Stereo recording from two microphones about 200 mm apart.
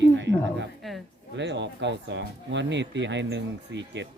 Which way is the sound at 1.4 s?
60° right (ahead or behind).